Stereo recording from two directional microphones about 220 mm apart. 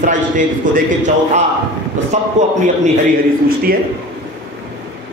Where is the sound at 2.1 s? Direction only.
30° right (ahead or behind).